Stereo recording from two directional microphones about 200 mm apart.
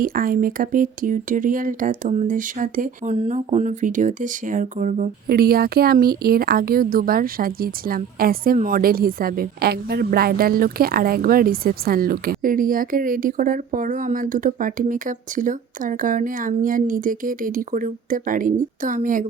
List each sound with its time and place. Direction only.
0.0 s speech: 45° right (ahead or behind)